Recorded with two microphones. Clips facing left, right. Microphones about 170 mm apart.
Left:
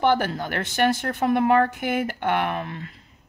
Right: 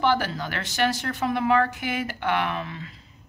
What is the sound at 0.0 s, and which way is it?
A woman's voice, 55° left (ahead or behind).